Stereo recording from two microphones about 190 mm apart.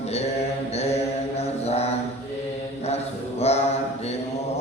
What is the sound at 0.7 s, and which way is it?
Mantra, 35° left (ahead or behind).